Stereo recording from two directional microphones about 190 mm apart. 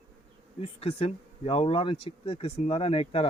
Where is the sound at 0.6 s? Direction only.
30° left (ahead or behind).